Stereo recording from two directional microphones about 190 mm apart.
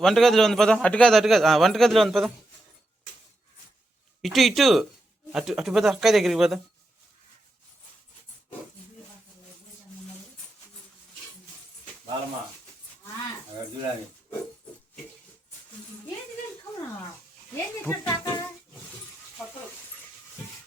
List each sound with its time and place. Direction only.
0.0 s a man's voice: centre (ahead or behind)
4.2 s a man's voice: centre (ahead or behind)
17.5 s speech: 10° left (ahead or behind)